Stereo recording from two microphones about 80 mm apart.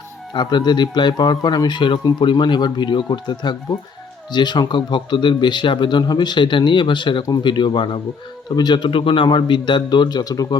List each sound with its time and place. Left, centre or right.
0.3 s speech: left